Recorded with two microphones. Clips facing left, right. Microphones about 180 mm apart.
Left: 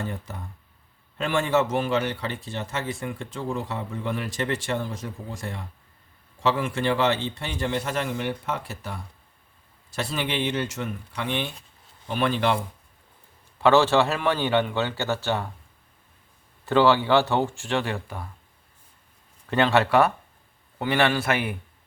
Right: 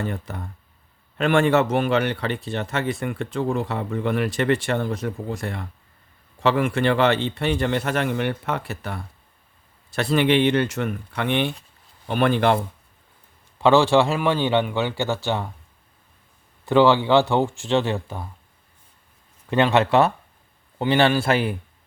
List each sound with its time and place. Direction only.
0.0 s speech: 65° right (ahead or behind)
13.6 s a man's voice: 15° right (ahead or behind)
16.6 s a man's voice: 15° right (ahead or behind)
19.5 s a man's voice: 15° right (ahead or behind)